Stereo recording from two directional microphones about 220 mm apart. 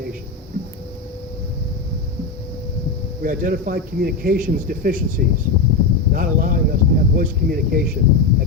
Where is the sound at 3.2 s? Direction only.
40° right (ahead or behind).